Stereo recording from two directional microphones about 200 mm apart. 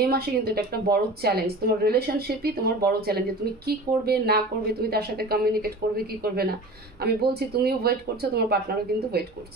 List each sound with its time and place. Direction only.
0.0 s speech: 50° right (ahead or behind)